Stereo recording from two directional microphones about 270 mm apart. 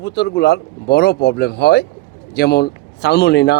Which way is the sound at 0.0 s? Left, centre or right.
Left.